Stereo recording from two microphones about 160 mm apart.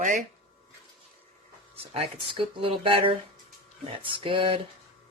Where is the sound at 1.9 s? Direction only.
35° right (ahead or behind).